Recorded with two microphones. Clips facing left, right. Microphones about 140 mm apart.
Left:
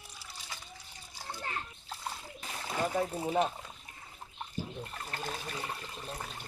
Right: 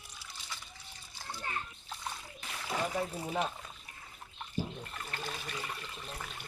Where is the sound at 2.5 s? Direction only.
30° left (ahead or behind).